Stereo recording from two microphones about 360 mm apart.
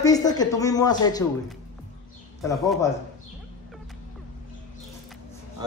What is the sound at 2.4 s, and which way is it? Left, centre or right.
Speech, centre.